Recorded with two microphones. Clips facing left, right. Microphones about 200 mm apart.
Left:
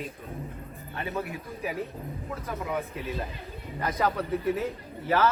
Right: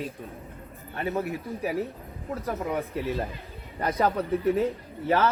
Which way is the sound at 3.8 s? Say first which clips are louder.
Right 3 dB; 30° right (ahead or behind).